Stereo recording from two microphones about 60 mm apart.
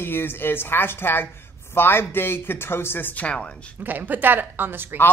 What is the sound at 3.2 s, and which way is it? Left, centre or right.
Speech, centre.